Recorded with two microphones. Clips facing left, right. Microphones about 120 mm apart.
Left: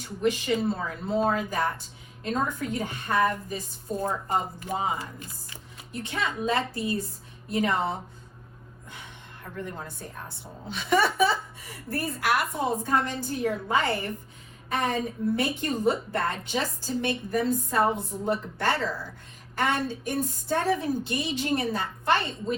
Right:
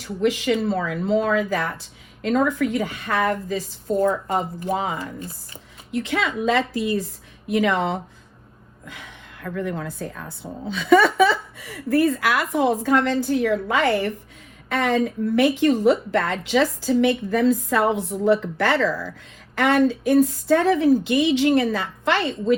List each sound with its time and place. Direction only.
0.2 s a woman's voice: 90° right
8.9 s a sound: 90° right
11.5 s a woman's voice: 90° right